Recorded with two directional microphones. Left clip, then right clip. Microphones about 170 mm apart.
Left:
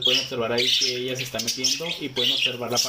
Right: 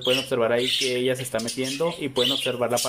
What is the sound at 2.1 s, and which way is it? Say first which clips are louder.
Speech: left 1 dB; 20° right (ahead or behind).